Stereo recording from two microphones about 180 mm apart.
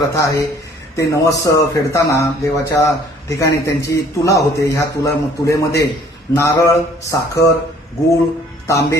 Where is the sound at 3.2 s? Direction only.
15° left (ahead or behind).